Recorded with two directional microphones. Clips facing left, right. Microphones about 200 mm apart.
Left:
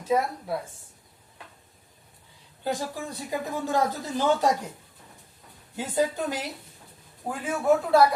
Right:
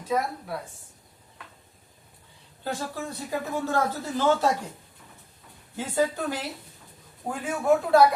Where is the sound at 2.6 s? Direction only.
15° left (ahead or behind).